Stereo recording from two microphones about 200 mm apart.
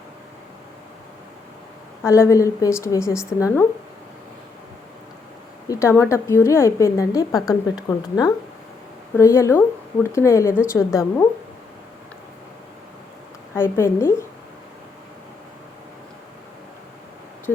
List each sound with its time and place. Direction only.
2.0 s a woman's voice: 15° left (ahead or behind)
5.6 s a woman's voice: 15° left (ahead or behind)
13.5 s a woman's voice: 10° left (ahead or behind)